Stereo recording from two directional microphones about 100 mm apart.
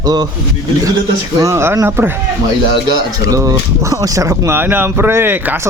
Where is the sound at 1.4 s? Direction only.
30° right (ahead or behind).